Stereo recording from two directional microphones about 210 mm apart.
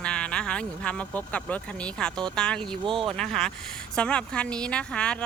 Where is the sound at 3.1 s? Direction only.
5° left (ahead or behind).